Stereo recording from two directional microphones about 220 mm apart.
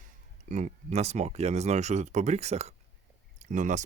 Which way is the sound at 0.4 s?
30° right (ahead or behind).